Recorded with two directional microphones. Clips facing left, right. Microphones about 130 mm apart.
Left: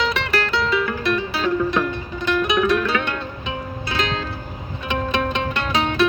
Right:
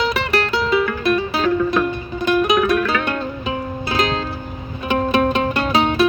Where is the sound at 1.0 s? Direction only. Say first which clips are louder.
Right 4 dB; 45° right (ahead or behind).